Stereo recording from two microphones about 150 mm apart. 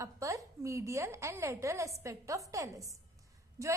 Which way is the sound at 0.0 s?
20° right (ahead or behind).